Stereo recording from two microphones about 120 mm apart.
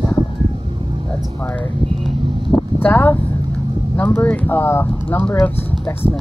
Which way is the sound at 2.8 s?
15° left (ahead or behind).